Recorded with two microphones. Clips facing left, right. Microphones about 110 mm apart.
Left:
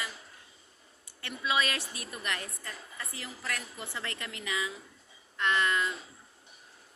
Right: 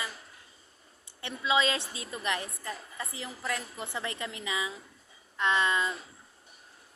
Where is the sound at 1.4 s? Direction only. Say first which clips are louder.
Right 3 dB; 20° right (ahead or behind).